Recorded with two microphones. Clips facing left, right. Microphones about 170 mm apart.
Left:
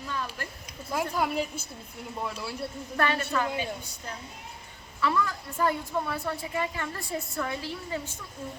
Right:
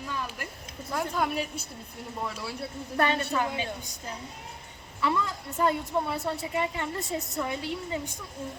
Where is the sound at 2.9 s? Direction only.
20° right (ahead or behind).